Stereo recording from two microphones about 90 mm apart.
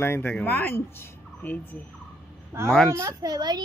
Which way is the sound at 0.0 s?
20° left (ahead or behind).